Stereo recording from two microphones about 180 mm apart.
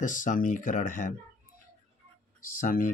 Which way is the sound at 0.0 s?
45° left (ahead or behind).